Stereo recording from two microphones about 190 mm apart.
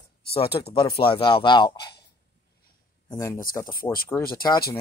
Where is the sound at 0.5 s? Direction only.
20° left (ahead or behind).